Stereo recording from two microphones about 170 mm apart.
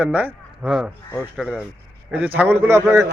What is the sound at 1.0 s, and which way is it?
Speech, 5° left (ahead or behind).